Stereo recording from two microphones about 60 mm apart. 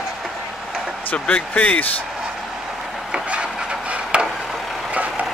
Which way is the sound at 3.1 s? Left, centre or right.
Centre.